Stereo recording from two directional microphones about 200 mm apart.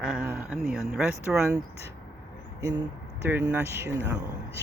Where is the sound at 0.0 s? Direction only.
5° right (ahead or behind).